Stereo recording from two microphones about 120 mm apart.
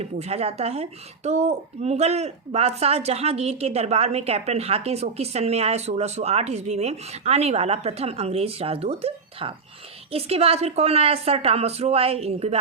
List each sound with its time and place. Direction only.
0.0 s speech: 60° right (ahead or behind)